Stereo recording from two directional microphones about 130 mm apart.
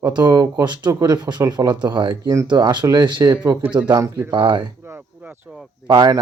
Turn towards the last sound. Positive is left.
turn(degrees=-30)  # may be behind; listen again after turning